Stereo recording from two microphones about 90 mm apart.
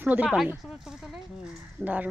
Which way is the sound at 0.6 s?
5° right (ahead or behind).